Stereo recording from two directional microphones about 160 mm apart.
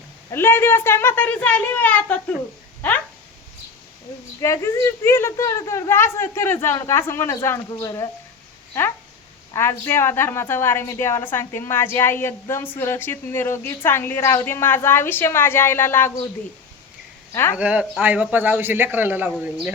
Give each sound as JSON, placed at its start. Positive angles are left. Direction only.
{"t": 0.3, "sound": "a woman's voice", "side_deg": 15}
{"t": 4.4, "sound": "a woman's voice", "side_deg": 20}
{"t": 9.5, "sound": "a woman's voice", "side_deg": 15}
{"t": 17.3, "sound": "a woman's voice", "side_deg": 15}
{"t": 17.6, "sound": "a man's voice", "side_deg": -10}